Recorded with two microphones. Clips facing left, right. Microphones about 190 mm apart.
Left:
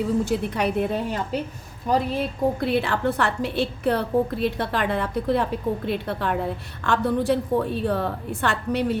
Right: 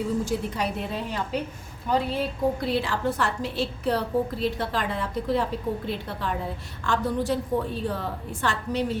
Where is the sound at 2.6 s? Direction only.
60° left (ahead or behind).